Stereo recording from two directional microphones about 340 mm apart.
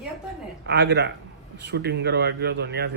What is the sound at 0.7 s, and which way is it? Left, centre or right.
A man's voice, right.